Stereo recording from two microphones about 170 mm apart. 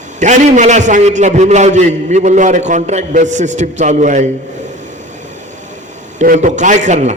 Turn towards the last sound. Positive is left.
turn(degrees=-45)  # may be behind; listen again after turning